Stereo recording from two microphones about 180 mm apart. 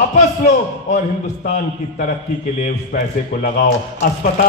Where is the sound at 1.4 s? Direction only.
45° left (ahead or behind).